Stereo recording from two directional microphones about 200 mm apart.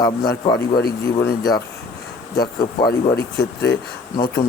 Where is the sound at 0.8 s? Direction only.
50° left (ahead or behind).